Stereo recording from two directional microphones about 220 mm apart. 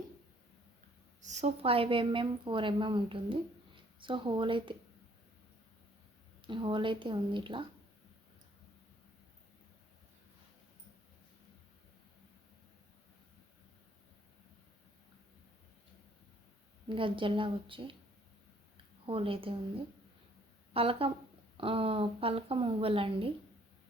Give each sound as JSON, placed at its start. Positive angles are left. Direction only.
{"t": 1.2, "sound": "speech", "side_deg": -30}
{"t": 6.4, "sound": "speech", "side_deg": -20}
{"t": 16.9, "sound": "speech", "side_deg": -25}
{"t": 19.0, "sound": "speech", "side_deg": -25}
{"t": 20.7, "sound": "speech", "side_deg": -25}